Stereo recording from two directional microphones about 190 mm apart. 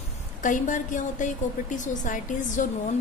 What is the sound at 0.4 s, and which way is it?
A woman's voice, 40° left (ahead or behind).